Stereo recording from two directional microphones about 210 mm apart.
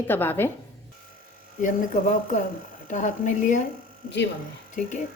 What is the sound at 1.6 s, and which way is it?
A woman's voice, 35° left (ahead or behind).